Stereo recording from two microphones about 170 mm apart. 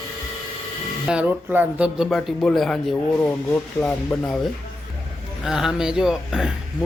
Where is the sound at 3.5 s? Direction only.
15° left (ahead or behind).